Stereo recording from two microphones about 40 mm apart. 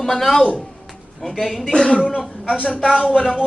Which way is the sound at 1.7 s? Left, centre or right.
Left.